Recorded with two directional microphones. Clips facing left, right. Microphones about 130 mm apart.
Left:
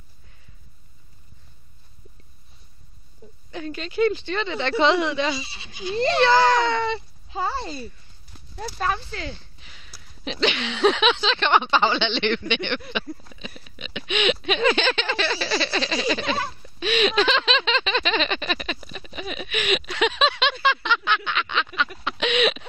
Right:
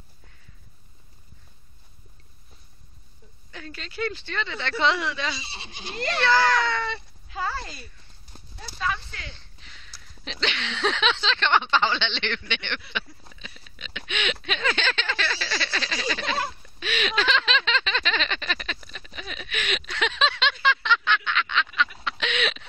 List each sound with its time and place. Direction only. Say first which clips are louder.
3.5 s speech: left 9 dB; 20° left (ahead or behind)
5.5 s speech: left 3 dB; 25° right (ahead or behind)
5.9 s speech: left 5 dB; 25° left (ahead or behind)
8.5 s speech: left 4 dB; 50° left (ahead or behind)
9.6 s speech: left 1 dB; 10° left (ahead or behind)
12.4 s a sound: left 7 dB; 15° left (ahead or behind)
13.7 s speech: left 6 dB; 15° left (ahead or behind)
16.8 s a sound: left 6 dB; 20° left (ahead or behind)